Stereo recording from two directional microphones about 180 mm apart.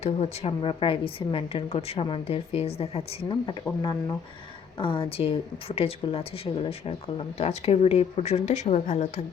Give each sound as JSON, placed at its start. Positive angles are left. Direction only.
{"t": 0.0, "sound": "speech", "side_deg": 35}